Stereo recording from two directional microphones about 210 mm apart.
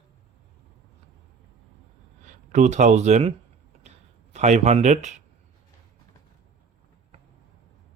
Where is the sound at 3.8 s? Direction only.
30° right (ahead or behind).